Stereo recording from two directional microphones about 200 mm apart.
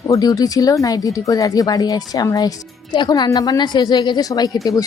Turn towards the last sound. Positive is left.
turn(degrees=15)  # may be behind; listen again after turning